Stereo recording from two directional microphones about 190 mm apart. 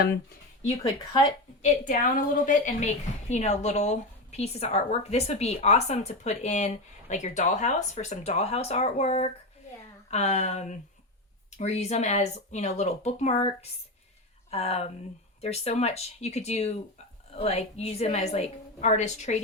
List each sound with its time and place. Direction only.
1.6 s a woman's voice: 40° left (ahead or behind)